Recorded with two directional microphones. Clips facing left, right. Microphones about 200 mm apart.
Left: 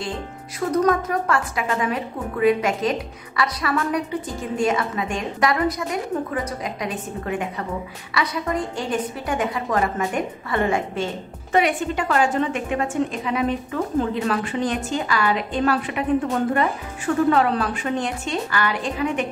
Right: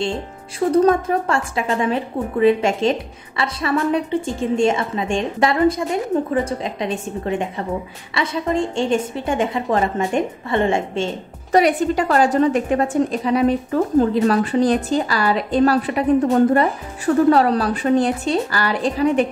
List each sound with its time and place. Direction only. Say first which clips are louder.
0.7 s a woman's voice: right 5 dB; 30° right (ahead or behind)
11.5 s a woman's voice: right 5 dB; 40° right (ahead or behind)